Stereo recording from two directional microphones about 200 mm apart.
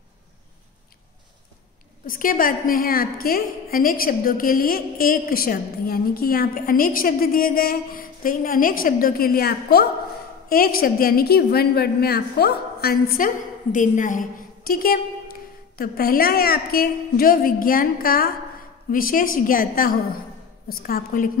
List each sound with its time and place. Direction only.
2.0 s a woman's voice: 45° left (ahead or behind)